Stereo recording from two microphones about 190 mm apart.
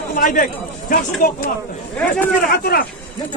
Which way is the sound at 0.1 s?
45° left (ahead or behind).